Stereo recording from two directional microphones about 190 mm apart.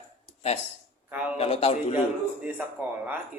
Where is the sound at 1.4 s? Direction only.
30° left (ahead or behind).